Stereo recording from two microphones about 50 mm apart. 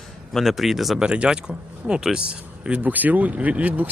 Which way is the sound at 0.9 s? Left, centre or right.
Centre.